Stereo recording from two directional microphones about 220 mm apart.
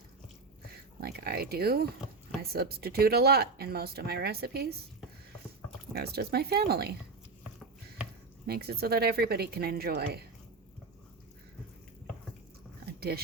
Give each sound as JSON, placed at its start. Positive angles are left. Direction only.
{"t": 1.0, "sound": "speech", "side_deg": -45}
{"t": 5.9, "sound": "speech", "side_deg": -45}
{"t": 8.4, "sound": "speech", "side_deg": -45}
{"t": 12.8, "sound": "a sound", "side_deg": -45}